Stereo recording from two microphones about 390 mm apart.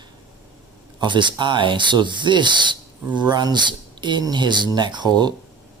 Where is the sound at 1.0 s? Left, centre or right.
Centre.